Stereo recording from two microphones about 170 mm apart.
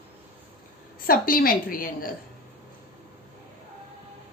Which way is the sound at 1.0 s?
55° left (ahead or behind).